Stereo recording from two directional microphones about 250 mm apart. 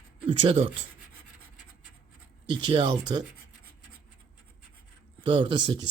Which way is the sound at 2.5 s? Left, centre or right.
Centre.